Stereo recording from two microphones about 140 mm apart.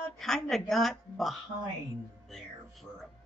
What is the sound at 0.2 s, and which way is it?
A woman's voice, centre (ahead or behind).